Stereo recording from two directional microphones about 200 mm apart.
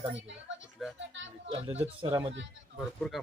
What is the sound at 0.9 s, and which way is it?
Speech, 65° right (ahead or behind).